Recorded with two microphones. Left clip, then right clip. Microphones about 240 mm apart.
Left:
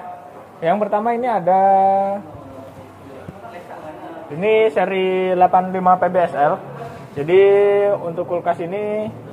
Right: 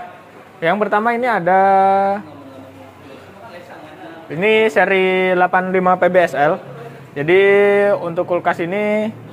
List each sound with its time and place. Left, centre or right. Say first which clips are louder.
0.6 s speech: right 2 dB; right
4.4 s speech: right 2 dB; right
7.2 s speech: right 1 dB; right